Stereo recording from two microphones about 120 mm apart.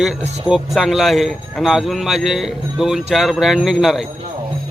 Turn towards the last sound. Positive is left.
turn(degrees=-5)  # may be behind; listen again after turning